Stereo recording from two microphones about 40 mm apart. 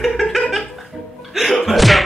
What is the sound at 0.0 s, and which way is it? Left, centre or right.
Music, centre.